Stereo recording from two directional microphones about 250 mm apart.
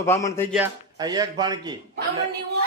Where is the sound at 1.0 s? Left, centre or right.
Centre.